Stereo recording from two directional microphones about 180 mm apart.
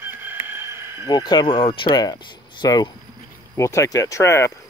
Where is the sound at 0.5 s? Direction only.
15° right (ahead or behind).